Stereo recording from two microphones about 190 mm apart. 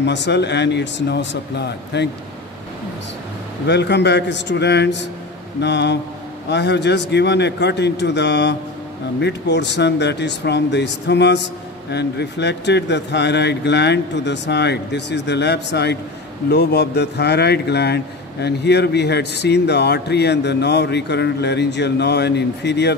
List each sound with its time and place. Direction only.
0.0 s a man's voice: 65° left (ahead or behind)
3.6 s a man's voice: 65° left (ahead or behind)